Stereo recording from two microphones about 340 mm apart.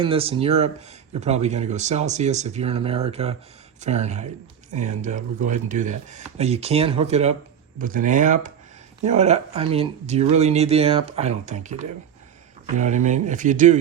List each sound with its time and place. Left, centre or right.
0.0 s speech: centre